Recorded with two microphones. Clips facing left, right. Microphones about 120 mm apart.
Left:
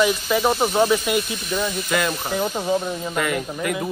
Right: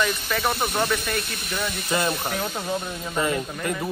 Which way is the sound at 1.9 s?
30° right (ahead or behind).